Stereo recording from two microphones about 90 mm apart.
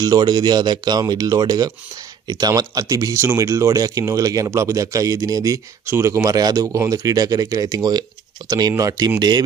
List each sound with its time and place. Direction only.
0.0 s speech: 50° right (ahead or behind)
5.9 s speech: 30° right (ahead or behind)
6.3 s speech: 45° right (ahead or behind)